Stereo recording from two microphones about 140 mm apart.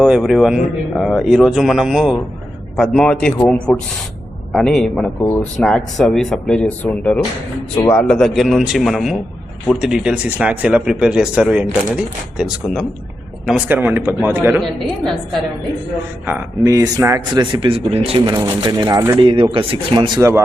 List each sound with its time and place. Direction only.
0.0 s speech: centre (ahead or behind)
14.6 s speech: 5° left (ahead or behind)
16.2 s speech: 15° right (ahead or behind)
17.4 s speech: 35° right (ahead or behind)
18.4 s speech: 30° right (ahead or behind)
19.2 s speech: 40° right (ahead or behind)